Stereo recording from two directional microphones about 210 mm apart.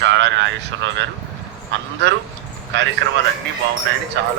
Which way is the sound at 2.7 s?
60° right (ahead or behind).